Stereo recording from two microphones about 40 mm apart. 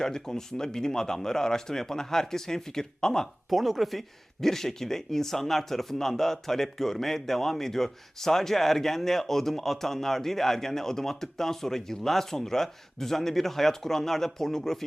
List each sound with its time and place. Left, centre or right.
0.0 s speech: centre
3.5 s speech: centre